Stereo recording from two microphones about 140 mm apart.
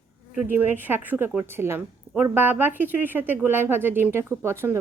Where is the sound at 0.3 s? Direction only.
15° right (ahead or behind).